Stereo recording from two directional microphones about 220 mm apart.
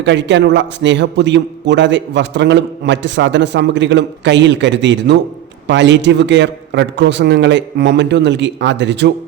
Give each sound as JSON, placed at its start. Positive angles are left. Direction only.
{"t": 0.0, "sound": "a man's voice", "side_deg": -55}